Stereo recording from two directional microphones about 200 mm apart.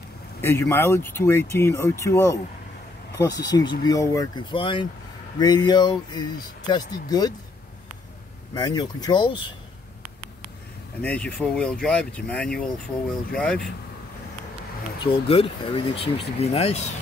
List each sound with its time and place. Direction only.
0.4 s speech: 10° left (ahead or behind)
8.5 s speech: 20° left (ahead or behind)
11.0 s speech: 5° left (ahead or behind)
15.0 s speech: 25° left (ahead or behind)